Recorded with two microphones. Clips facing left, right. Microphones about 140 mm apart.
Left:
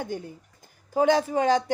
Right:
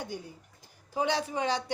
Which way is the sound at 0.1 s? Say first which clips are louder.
Left 6 dB; 50° left (ahead or behind).